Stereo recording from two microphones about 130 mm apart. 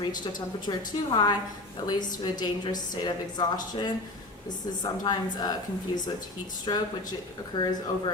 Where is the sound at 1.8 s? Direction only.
35° left (ahead or behind).